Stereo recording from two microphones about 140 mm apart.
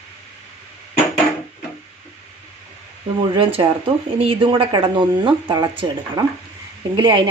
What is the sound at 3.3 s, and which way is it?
Speech, 40° right (ahead or behind).